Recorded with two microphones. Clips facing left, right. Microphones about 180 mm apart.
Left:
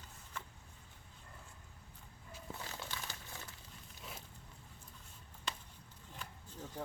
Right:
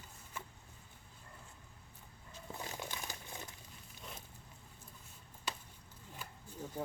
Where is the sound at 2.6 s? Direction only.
15° right (ahead or behind).